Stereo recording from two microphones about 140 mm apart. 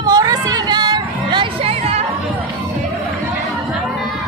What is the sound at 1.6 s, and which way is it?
Music, 45° right (ahead or behind).